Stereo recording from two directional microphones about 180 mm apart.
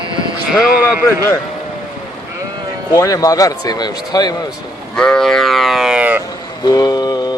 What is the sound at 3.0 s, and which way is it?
A man's voice, 20° left (ahead or behind).